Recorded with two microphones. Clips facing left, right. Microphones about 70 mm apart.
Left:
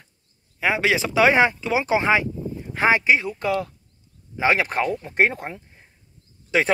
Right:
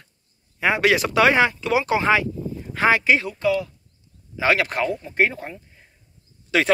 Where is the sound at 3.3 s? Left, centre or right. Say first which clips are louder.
Right 2 dB; left.